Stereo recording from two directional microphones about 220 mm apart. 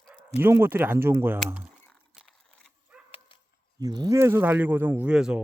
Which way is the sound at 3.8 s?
15° right (ahead or behind).